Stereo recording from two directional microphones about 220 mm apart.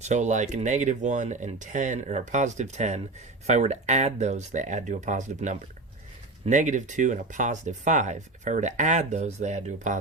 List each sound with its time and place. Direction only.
0.0 s speech: 30° right (ahead or behind)